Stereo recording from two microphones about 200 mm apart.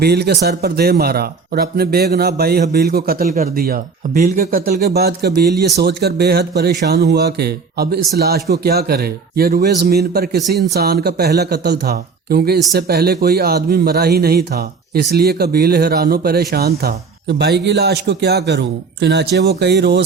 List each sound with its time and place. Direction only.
0.0 s speech: 55° right (ahead or behind)